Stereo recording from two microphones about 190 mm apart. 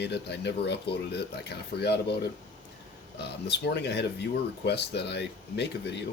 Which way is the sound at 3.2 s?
60° left (ahead or behind).